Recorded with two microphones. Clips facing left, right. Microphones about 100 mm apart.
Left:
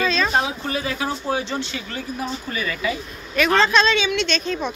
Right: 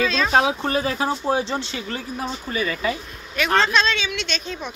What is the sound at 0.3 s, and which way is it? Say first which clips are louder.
Speech: right 3 dB; 90° right.